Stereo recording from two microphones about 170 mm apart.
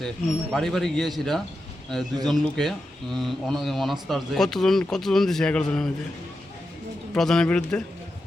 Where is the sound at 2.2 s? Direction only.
Centre (ahead or behind).